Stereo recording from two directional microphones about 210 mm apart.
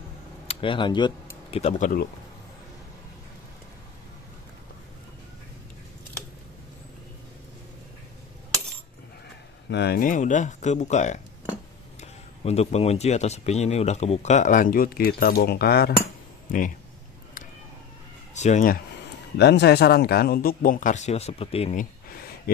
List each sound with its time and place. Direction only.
0.5 s speech: 25° left (ahead or behind); by 2.0 s 40° left (ahead or behind)
9.7 s speech: 50° left (ahead or behind)
18.3 s speech: 35° left (ahead or behind)
19.3 s speech: 55° left (ahead or behind); by 21.8 s 30° left (ahead or behind)